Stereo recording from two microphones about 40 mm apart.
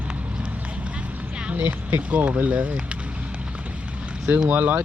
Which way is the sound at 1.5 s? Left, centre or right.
Right.